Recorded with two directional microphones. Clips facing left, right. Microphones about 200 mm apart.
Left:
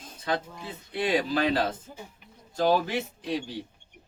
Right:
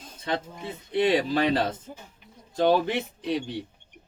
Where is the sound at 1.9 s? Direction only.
15° right (ahead or behind).